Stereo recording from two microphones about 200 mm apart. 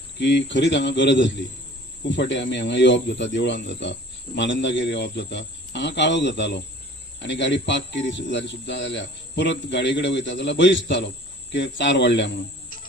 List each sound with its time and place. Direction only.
0.2 s speech: 60° left (ahead or behind)